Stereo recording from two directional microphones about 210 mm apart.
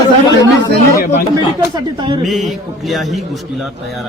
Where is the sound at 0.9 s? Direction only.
45° left (ahead or behind).